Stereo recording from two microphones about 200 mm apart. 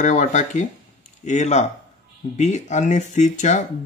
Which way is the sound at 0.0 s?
40° left (ahead or behind).